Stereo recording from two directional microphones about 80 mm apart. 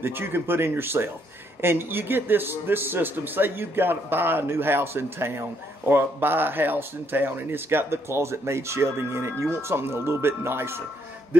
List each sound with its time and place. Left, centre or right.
0.0 s a man's voice: right